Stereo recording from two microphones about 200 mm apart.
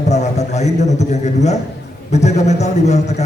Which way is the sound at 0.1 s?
35° left (ahead or behind).